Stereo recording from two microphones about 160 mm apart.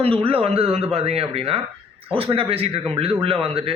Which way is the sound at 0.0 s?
35° right (ahead or behind).